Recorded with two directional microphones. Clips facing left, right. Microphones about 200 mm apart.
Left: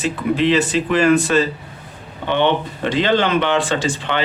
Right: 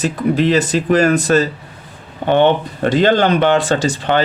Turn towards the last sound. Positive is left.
turn(degrees=-40)  # may be behind; listen again after turning